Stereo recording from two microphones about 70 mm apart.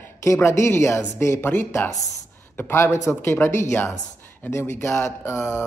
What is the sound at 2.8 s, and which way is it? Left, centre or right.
Speech, left.